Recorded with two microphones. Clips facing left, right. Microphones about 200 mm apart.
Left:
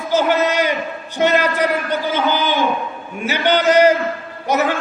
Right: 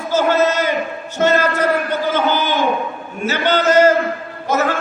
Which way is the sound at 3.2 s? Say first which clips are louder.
Even; 15° left (ahead or behind).